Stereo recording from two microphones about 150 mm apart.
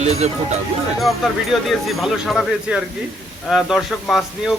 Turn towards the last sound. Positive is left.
turn(degrees=0)  # may be behind; listen again after turning